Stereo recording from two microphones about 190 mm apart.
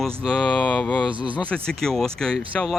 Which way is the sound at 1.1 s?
25° right (ahead or behind).